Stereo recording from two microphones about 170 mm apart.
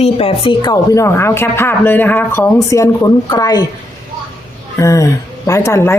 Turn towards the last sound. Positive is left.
turn(degrees=15)  # may be behind; listen again after turning